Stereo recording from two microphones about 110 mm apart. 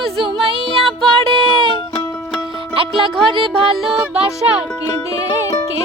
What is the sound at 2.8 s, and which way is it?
Music, 50° right (ahead or behind).